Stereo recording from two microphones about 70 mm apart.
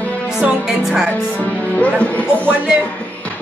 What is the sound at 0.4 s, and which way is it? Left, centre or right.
Speech, centre.